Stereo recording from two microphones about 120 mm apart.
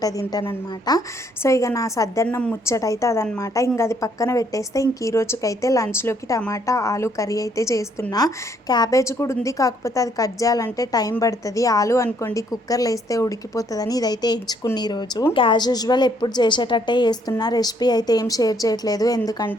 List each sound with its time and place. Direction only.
0.0 s a woman's voice: 30° left (ahead or behind)
2.2 s a woman's voice: 10° left (ahead or behind)
2.6 s a woman's voice: 25° left (ahead or behind)